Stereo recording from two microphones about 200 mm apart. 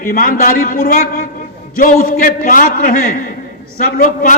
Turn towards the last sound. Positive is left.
turn(degrees=45)  # may be behind; listen again after turning